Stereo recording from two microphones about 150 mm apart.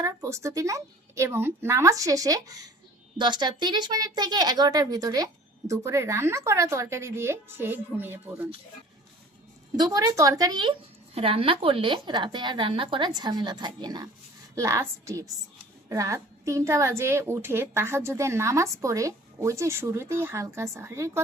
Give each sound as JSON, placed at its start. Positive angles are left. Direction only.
{"t": 0.0, "sound": "a woman's voice", "side_deg": -20}
{"t": 9.7, "sound": "a woman's voice", "side_deg": -25}